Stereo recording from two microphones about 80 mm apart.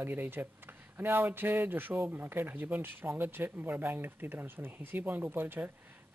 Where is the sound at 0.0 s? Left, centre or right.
Right.